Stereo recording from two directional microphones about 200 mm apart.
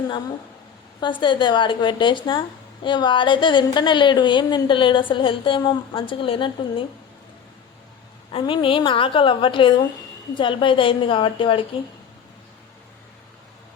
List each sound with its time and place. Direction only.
0.9 s speech: 25° left (ahead or behind)
8.3 s speech: 25° left (ahead or behind)